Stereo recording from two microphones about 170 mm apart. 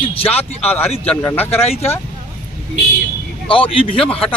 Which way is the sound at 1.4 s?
35° left (ahead or behind).